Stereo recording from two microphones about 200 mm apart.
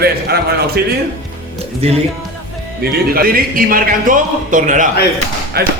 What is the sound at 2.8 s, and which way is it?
A man's voice, 50° right (ahead or behind).